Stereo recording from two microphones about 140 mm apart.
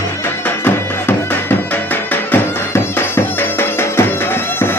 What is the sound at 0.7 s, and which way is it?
Music, 15° left (ahead or behind).